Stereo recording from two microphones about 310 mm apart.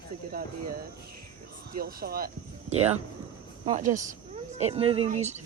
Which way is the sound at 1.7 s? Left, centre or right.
Right.